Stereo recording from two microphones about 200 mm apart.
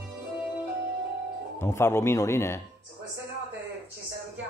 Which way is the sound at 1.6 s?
15° left (ahead or behind).